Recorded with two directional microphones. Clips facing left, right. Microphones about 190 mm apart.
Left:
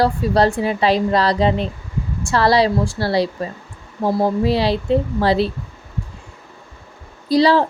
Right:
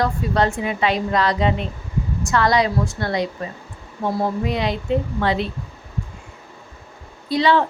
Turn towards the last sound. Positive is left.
turn(degrees=35)  # may be behind; listen again after turning